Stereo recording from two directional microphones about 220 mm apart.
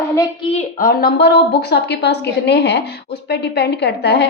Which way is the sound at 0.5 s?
40° left (ahead or behind).